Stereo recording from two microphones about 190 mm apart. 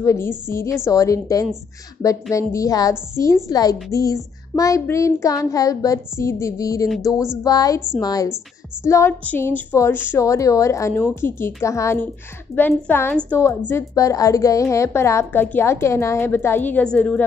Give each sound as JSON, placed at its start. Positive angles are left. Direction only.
{"t": 0.0, "sound": "a woman's voice", "side_deg": 15}